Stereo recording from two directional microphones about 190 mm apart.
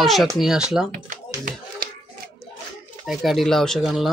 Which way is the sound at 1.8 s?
50° right (ahead or behind).